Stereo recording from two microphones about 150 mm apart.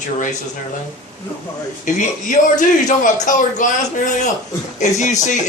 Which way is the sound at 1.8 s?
55° left (ahead or behind).